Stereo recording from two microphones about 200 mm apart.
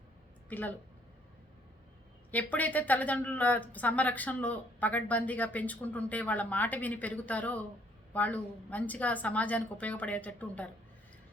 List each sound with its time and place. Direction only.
0.4 s speech: 10° left (ahead or behind)
2.3 s a woman's voice: 10° left (ahead or behind)